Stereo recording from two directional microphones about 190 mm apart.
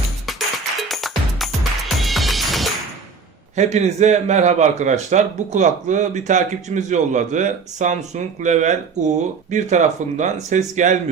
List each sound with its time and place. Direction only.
0.3 s music: centre (ahead or behind)
3.5 s a man's voice: 35° right (ahead or behind)